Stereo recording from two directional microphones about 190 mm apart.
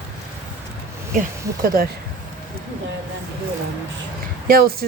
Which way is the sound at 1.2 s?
50° right (ahead or behind).